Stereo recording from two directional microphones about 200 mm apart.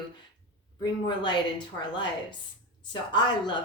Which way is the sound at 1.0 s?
25° left (ahead or behind).